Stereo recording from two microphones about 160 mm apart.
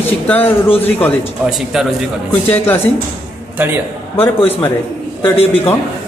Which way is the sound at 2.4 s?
10° left (ahead or behind).